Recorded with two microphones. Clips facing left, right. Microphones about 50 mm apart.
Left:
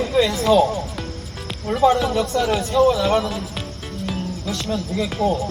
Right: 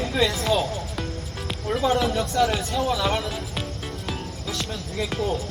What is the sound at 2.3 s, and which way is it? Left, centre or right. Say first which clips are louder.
Speech: left 5 dB; centre.